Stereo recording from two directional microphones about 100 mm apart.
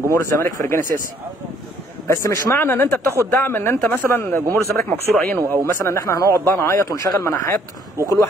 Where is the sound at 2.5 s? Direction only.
20° left (ahead or behind).